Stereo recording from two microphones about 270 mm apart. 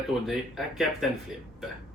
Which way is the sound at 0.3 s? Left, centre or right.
Centre.